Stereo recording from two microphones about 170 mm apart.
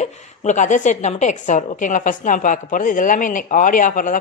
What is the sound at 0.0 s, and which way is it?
A woman's voice, 45° left (ahead or behind).